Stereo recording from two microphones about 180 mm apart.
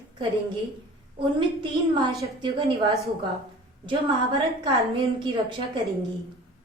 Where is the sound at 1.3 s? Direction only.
25° right (ahead or behind).